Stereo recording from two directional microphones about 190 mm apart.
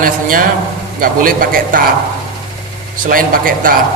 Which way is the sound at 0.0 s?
50° right (ahead or behind).